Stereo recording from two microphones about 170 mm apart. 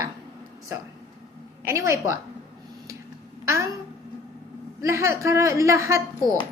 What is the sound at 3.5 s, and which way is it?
Speech, 15° right (ahead or behind).